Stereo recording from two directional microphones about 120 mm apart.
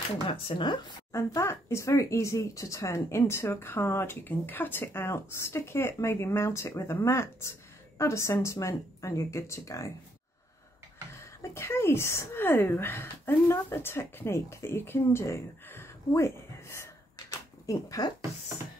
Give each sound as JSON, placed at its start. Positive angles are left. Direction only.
{"t": 0.5, "sound": "speech", "side_deg": 40}
{"t": 1.1, "sound": "speech", "side_deg": 25}
{"t": 11.1, "sound": "speech", "side_deg": 25}